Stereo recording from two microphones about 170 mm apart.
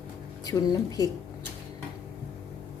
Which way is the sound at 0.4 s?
20° left (ahead or behind).